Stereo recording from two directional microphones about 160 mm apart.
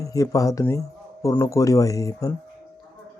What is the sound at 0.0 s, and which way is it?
Speech, 20° left (ahead or behind).